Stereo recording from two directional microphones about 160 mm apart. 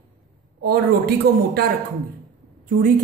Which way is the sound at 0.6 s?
75° right (ahead or behind).